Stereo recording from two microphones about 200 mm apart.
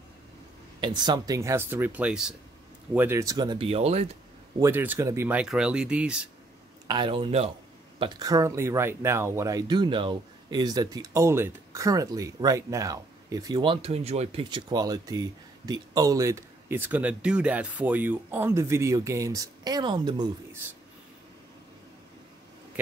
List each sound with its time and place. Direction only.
0.7 s speech: 20° right (ahead or behind)
4.6 s speech: 10° right (ahead or behind)
6.9 s speech: 25° right (ahead or behind)